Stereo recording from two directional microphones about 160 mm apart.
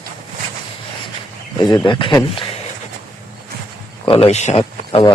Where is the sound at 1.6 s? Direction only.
25° left (ahead or behind).